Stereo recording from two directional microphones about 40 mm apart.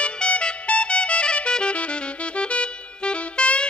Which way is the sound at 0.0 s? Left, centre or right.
Left.